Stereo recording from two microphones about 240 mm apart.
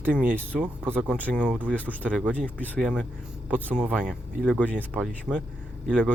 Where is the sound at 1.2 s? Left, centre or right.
Centre.